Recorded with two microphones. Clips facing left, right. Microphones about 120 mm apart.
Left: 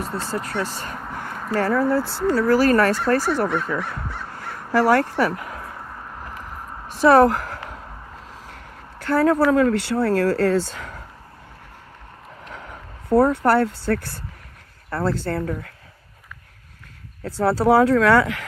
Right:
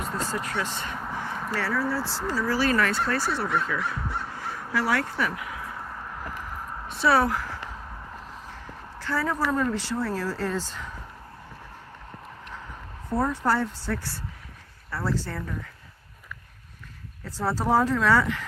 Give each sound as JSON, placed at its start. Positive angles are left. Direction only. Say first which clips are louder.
{"t": 0.3, "sound": "speech", "louder": "left 4 dB", "side_deg": 35}
{"t": 1.2, "sound": "a sound", "louder": "left 9 dB", "side_deg": 50}
{"t": 2.3, "sound": "speech", "louder": "left 8 dB", "side_deg": 50}
{"t": 6.9, "sound": "speech", "louder": "left 8 dB", "side_deg": 45}
{"t": 9.0, "sound": "speech", "louder": "left 10 dB", "side_deg": 60}
{"t": 12.5, "sound": "speech", "louder": "left 2 dB", "side_deg": 70}
{"t": 17.2, "sound": "speech", "louder": "left 8 dB", "side_deg": 70}